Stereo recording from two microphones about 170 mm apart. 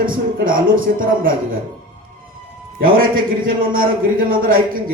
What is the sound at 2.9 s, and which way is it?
A man's voice, 55° right (ahead or behind).